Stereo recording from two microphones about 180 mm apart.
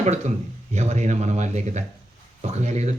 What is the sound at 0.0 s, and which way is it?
A man's voice, 40° right (ahead or behind).